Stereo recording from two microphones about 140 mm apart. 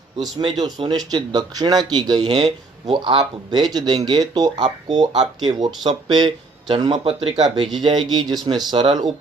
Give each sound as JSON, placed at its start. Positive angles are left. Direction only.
{"t": 0.2, "sound": "speech", "side_deg": -30}
{"t": 7.3, "sound": "speech", "side_deg": -50}
{"t": 7.8, "sound": "speech", "side_deg": -30}